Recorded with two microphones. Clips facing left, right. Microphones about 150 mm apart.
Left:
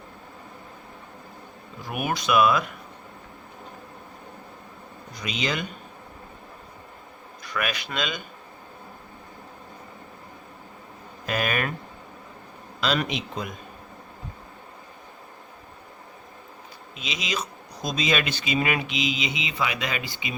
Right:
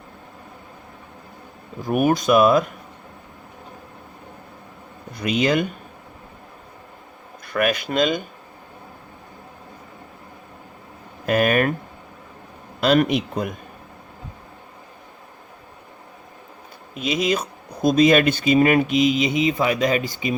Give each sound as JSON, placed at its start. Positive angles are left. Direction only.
{"t": 1.8, "sound": "speech", "side_deg": -45}
{"t": 5.1, "sound": "speech", "side_deg": -55}
{"t": 7.4, "sound": "speech", "side_deg": -50}
{"t": 11.3, "sound": "speech", "side_deg": -50}
{"t": 12.8, "sound": "speech", "side_deg": -50}
{"t": 16.9, "sound": "speech", "side_deg": -50}